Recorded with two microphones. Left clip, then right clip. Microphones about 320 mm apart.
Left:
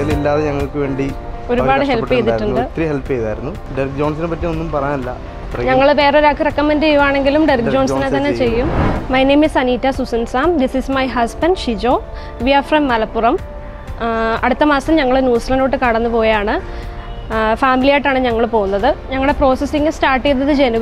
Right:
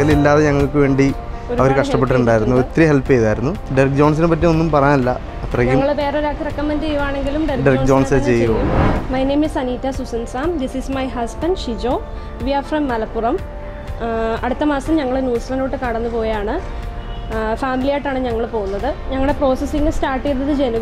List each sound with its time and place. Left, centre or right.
0.2 s speech: right
5.8 s a woman's voice: left
8.6 s speech: centre
9.1 s a woman's voice: left
19.0 s a woman's voice: centre